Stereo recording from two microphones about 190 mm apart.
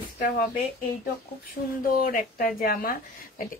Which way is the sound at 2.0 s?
45° left (ahead or behind).